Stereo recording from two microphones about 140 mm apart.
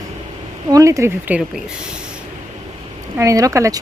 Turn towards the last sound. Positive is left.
turn(degrees=-25)  # may be behind; listen again after turning